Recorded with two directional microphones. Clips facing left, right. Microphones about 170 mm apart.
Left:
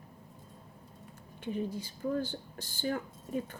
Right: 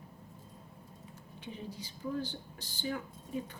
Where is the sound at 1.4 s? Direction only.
50° left (ahead or behind).